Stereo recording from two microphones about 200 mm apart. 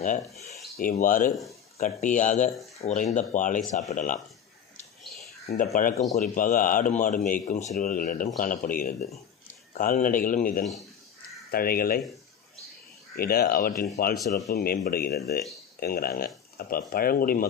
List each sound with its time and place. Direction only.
0.7 s a man's voice: 45° left (ahead or behind)
5.5 s a man's voice: 40° left (ahead or behind)
13.1 s speech: 50° left (ahead or behind)
14.1 s speech: centre (ahead or behind)
14.5 s speech: 50° left (ahead or behind)